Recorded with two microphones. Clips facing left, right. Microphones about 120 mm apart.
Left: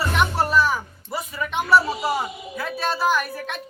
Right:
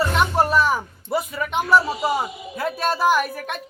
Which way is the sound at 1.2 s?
5° right (ahead or behind).